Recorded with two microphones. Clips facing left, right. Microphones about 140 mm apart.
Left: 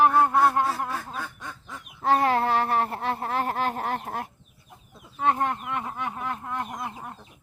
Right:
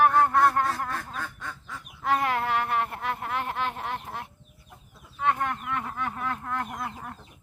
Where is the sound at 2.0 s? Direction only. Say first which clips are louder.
Left 4 dB; 35° left (ahead or behind).